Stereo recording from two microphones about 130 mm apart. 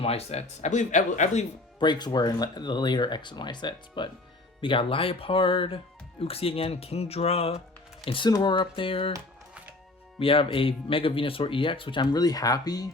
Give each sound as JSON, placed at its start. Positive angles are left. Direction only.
{"t": 0.0, "sound": "speech", "side_deg": 50}
{"t": 1.8, "sound": "speech", "side_deg": 35}
{"t": 8.0, "sound": "speech", "side_deg": 40}
{"t": 10.2, "sound": "speech", "side_deg": 45}
{"t": 12.1, "sound": "speech", "side_deg": 30}